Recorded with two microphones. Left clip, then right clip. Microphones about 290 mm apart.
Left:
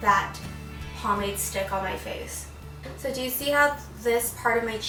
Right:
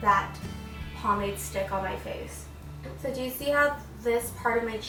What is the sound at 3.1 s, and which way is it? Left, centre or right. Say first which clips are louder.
A woman's voice: left 2 dB; centre.